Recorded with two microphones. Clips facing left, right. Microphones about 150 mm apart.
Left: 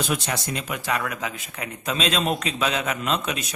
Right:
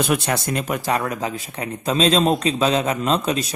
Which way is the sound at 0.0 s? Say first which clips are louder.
Right 6 dB; 55° right (ahead or behind).